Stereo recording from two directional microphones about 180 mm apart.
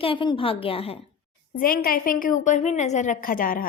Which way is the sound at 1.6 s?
55° left (ahead or behind).